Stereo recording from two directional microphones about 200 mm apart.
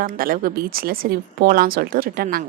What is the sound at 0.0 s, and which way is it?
Speech, 45° right (ahead or behind).